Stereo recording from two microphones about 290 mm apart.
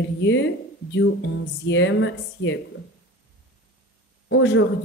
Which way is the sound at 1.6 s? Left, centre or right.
Left.